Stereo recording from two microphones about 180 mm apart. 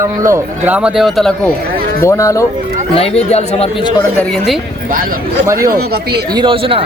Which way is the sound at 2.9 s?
35° left (ahead or behind).